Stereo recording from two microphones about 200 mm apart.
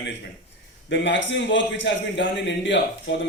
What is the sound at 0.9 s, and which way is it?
A man's voice, 65° left (ahead or behind).